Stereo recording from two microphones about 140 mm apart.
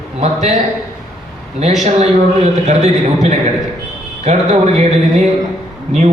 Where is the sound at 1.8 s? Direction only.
50° right (ahead or behind).